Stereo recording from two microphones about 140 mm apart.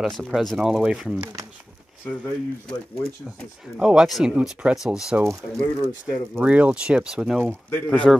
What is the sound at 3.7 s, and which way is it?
Speech, 5° right (ahead or behind).